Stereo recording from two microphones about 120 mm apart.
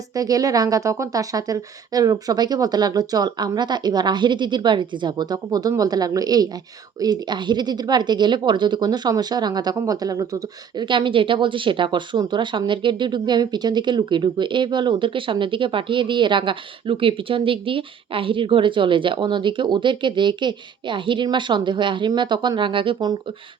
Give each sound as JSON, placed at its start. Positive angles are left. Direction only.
{"t": 0.1, "sound": "a woman's voice", "side_deg": -30}
{"t": 10.8, "sound": "speech", "side_deg": -40}